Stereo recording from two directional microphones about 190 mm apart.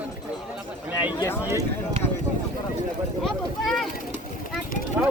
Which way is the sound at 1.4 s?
15° right (ahead or behind).